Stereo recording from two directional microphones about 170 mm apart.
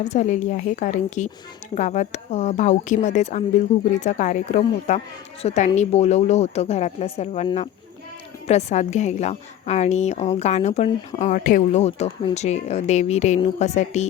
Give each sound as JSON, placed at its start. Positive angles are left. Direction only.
{"t": 0.0, "sound": "a woman's voice", "side_deg": 45}
{"t": 8.4, "sound": "a woman's voice", "side_deg": 40}
{"t": 11.8, "sound": "a woman's voice", "side_deg": 40}